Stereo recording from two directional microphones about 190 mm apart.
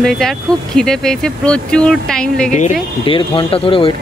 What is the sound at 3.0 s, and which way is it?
Speech, 25° left (ahead or behind).